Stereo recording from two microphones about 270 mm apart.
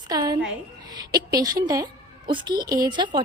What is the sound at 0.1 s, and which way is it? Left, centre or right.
A woman's voice, centre.